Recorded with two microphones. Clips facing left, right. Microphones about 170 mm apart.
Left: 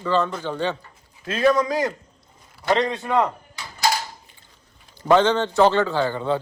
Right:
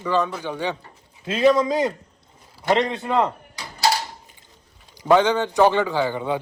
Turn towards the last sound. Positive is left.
turn(degrees=-15)  # may be behind; listen again after turning